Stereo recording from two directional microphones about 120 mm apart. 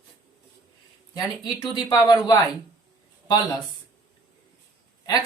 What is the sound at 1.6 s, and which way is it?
Speech, 35° left (ahead or behind).